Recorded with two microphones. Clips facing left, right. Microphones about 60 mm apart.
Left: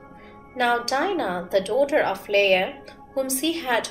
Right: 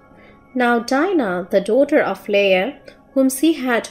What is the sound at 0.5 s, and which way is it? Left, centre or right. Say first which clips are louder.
A woman's voice: right 6 dB; right.